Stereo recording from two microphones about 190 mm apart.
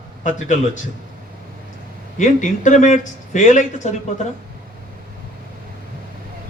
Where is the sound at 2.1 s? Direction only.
40° left (ahead or behind).